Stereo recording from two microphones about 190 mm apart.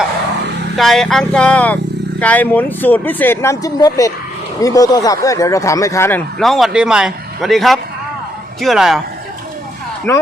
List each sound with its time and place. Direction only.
0.8 s speech: centre (ahead or behind)